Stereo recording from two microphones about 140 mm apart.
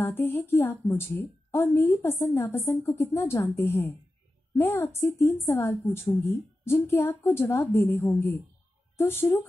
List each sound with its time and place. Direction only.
0.0 s a woman's voice: 15° left (ahead or behind)